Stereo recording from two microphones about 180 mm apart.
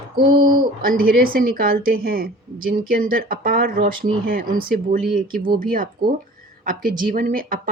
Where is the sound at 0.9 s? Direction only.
55° right (ahead or behind).